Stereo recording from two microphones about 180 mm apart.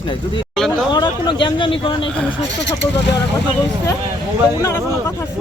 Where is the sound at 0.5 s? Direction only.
5° left (ahead or behind).